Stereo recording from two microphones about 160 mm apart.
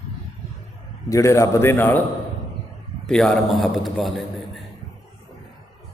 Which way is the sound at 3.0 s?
5° left (ahead or behind).